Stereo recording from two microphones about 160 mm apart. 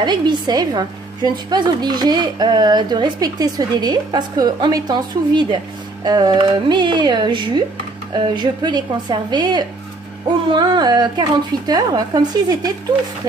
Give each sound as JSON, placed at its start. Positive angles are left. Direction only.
{"t": 0.0, "sound": "a woman's voice", "side_deg": -25}